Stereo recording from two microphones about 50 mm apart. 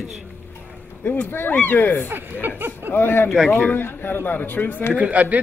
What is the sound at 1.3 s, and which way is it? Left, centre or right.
Speech, left.